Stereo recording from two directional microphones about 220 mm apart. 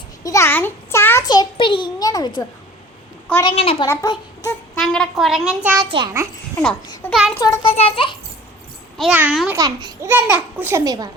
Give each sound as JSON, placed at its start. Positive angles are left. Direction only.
{"t": 0.2, "sound": "a child's voice", "side_deg": 15}
{"t": 3.4, "sound": "a child's voice", "side_deg": 25}
{"t": 3.8, "sound": "a child's voice", "side_deg": 15}
{"t": 4.8, "sound": "a child's voice", "side_deg": 0}
{"t": 5.9, "sound": "a child's voice", "side_deg": -20}
{"t": 6.8, "sound": "a sound", "side_deg": 15}
{"t": 7.1, "sound": "a child's voice", "side_deg": 0}
{"t": 7.3, "sound": "a child's voice", "side_deg": 15}
{"t": 9.0, "sound": "a child's voice", "side_deg": -5}
{"t": 9.6, "sound": "a child's voice", "side_deg": -15}